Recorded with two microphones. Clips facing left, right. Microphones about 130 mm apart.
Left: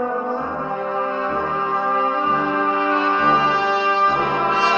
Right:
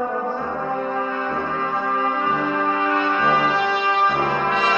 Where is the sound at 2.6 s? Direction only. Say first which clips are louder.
Left 1 dB; 25° left (ahead or behind).